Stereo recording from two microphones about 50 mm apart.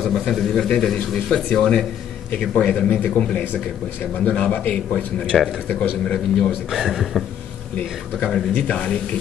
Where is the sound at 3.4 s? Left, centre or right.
Left; by 6.5 s centre.